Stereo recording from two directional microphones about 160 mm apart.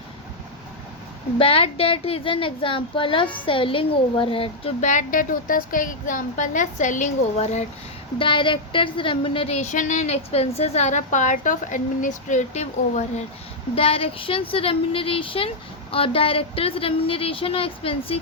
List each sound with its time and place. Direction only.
1.4 s speech: 35° left (ahead or behind)
4.9 s a woman's voice: 55° left (ahead or behind)
8.2 s speech: 30° left (ahead or behind)
9.7 s a woman's voice: 50° left (ahead or behind)